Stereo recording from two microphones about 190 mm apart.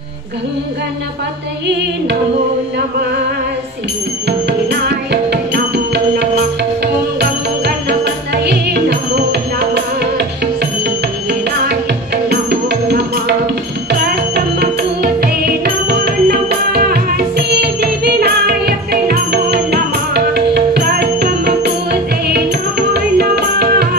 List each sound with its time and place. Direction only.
4.3 s music: 60° right (ahead or behind)
7.2 s music: 60° right (ahead or behind)
12.3 s music: 60° right (ahead or behind)